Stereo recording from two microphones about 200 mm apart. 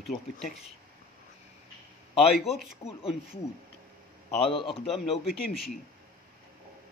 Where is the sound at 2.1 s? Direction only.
Centre (ahead or behind).